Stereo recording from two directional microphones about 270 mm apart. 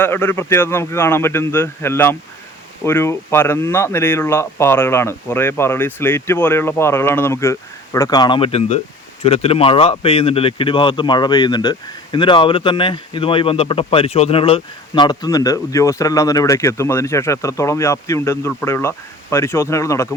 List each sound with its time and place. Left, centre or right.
0.0 s speech: centre